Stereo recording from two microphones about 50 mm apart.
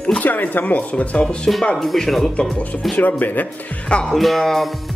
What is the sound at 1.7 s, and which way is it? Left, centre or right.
Speech, centre.